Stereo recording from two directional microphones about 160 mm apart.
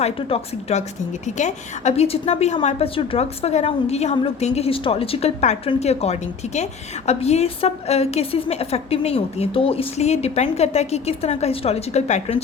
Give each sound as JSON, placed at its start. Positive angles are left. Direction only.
{"t": 0.0, "sound": "a woman's voice", "side_deg": 40}